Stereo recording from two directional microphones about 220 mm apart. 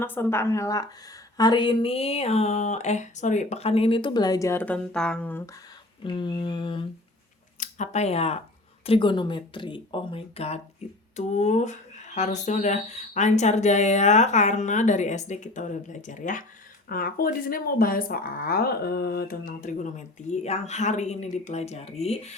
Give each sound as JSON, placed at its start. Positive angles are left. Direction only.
{"t": 0.0, "sound": "speech", "side_deg": 10}
{"t": 6.1, "sound": "speech", "side_deg": 20}